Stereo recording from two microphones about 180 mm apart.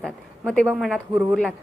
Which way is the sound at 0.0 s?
5° left (ahead or behind).